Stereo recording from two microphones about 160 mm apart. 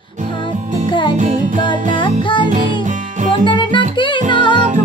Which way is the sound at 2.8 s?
50° right (ahead or behind).